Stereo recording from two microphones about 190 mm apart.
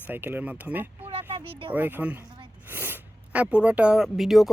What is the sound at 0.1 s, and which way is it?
Speech, 10° right (ahead or behind).